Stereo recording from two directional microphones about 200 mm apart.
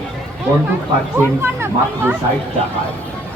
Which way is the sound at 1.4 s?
10° right (ahead or behind).